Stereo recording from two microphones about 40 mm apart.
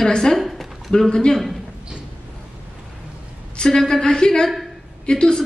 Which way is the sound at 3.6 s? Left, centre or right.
Centre.